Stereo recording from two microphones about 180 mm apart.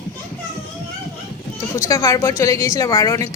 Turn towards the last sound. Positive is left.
turn(degrees=15)  # may be behind; listen again after turning